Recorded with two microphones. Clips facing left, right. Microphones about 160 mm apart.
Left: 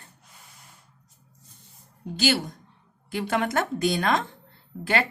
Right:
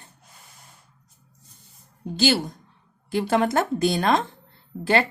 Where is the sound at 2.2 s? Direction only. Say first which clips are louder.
Right 3 dB; 35° right (ahead or behind).